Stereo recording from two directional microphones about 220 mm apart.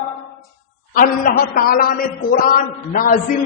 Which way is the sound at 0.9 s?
40° left (ahead or behind).